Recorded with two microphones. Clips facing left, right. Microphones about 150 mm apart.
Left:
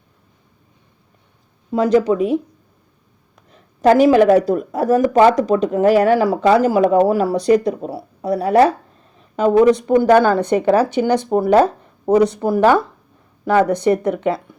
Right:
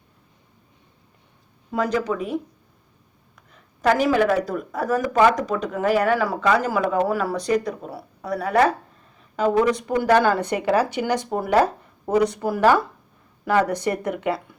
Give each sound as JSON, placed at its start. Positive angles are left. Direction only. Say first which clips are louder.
{"t": 1.7, "sound": "speech", "louder": "left 8 dB", "side_deg": 25}
{"t": 3.8, "sound": "a woman's voice", "louder": "left 8 dB", "side_deg": 30}
{"t": 4.1, "sound": "speech", "louder": "left 8 dB", "side_deg": 40}